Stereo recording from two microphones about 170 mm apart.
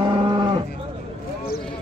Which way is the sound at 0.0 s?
30° right (ahead or behind).